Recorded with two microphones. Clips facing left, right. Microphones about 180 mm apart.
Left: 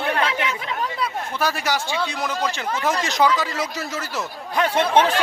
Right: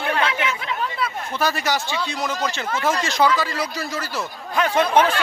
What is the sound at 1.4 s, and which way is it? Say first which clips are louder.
Speech: right 1 dB; 10° left (ahead or behind).